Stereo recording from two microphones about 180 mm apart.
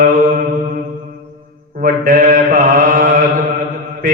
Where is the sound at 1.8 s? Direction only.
50° right (ahead or behind).